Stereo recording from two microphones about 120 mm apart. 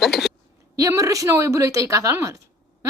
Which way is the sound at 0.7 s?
30° right (ahead or behind).